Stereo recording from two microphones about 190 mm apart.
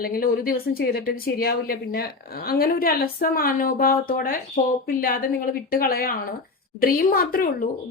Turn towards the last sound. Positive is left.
turn(degrees=50)  # may be behind; listen again after turning